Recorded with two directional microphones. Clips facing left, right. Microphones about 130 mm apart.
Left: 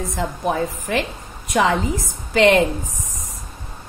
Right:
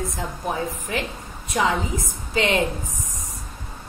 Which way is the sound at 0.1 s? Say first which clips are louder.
Left 5 dB; 75° left (ahead or behind).